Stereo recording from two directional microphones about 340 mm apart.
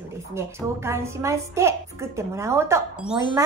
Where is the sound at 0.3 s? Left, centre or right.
Centre.